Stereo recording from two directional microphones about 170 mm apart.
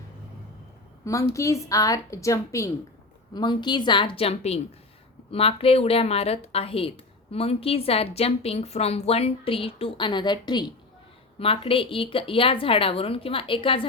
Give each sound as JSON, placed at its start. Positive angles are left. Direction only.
{"t": 1.0, "sound": "a woman's voice", "side_deg": 20}